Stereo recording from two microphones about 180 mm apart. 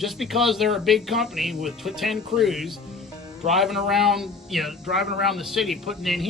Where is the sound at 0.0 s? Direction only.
Centre (ahead or behind).